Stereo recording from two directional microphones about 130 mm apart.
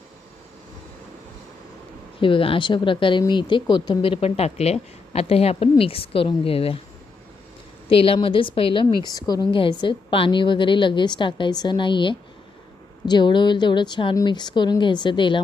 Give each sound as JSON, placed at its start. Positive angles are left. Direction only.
{"t": 2.2, "sound": "speech", "side_deg": 45}
{"t": 7.9, "sound": "speech", "side_deg": 45}
{"t": 9.0, "sound": "a woman's voice", "side_deg": 30}